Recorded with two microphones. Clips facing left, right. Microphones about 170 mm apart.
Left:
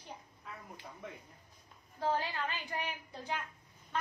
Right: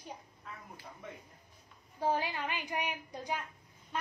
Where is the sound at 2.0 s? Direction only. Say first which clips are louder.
Right 1 dB; 15° right (ahead or behind).